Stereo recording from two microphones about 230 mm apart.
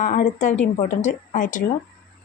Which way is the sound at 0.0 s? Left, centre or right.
Left.